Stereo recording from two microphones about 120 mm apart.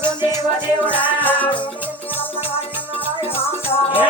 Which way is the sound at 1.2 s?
15° left (ahead or behind).